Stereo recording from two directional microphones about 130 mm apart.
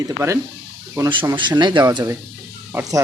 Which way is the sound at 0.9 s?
30° right (ahead or behind).